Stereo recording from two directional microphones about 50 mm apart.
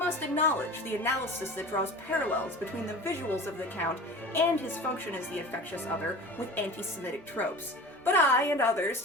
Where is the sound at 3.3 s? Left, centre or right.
Left.